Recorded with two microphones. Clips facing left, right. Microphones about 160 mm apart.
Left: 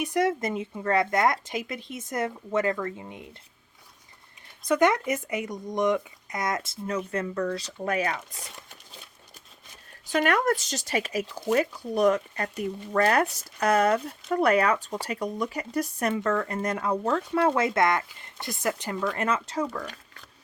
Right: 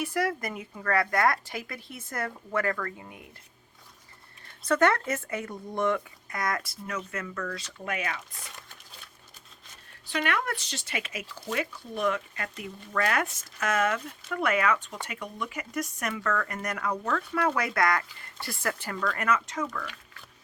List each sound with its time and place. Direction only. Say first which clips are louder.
0.0 s speech: left 4 dB; 20° left (ahead or behind)
4.6 s speech: left 2 dB; 15° left (ahead or behind); by 8.2 s 35° left (ahead or behind)
10.1 s speech: left 6 dB; 45° left (ahead or behind)